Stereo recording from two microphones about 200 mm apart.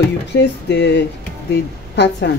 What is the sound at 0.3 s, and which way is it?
Speech, 60° left (ahead or behind).